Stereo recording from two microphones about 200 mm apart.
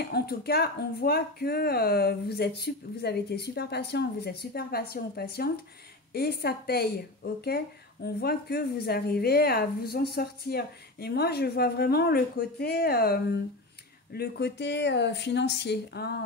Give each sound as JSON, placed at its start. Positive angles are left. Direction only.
{"t": 0.1, "sound": "a woman's voice", "side_deg": 50}